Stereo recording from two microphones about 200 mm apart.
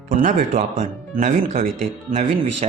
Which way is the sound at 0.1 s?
40° right (ahead or behind).